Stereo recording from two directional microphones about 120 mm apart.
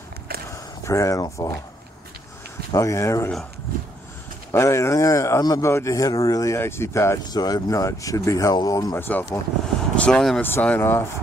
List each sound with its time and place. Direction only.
0.5 s speech: 25° left (ahead or behind)
2.7 s speech: 25° left (ahead or behind)
4.5 s speech: 25° left (ahead or behind)